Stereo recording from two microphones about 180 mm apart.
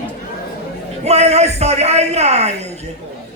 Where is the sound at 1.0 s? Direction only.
35° right (ahead or behind).